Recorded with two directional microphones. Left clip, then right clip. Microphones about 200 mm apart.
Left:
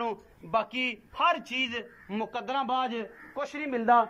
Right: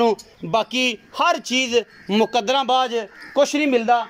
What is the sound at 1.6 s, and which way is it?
A man's voice, 35° right (ahead or behind).